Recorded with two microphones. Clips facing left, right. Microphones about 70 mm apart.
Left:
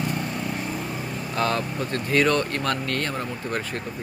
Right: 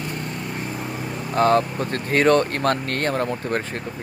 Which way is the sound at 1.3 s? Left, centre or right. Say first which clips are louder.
Right 8 dB; right.